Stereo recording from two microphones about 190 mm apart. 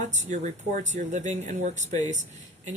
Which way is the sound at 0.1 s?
40° right (ahead or behind).